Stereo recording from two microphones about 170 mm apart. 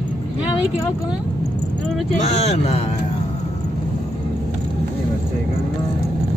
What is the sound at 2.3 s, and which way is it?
Speech, 40° left (ahead or behind).